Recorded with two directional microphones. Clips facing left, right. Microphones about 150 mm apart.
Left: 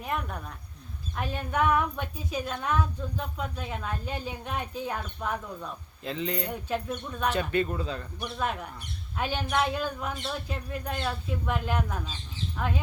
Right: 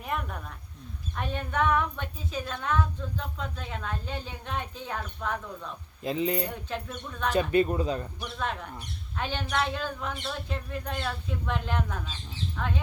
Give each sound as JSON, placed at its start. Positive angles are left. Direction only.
{"t": 0.0, "sound": "speech", "side_deg": 0}
{"t": 6.0, "sound": "speech", "side_deg": -15}
{"t": 6.7, "sound": "speech", "side_deg": 10}
{"t": 7.3, "sound": "speech", "side_deg": -20}
{"t": 8.2, "sound": "speech", "side_deg": 10}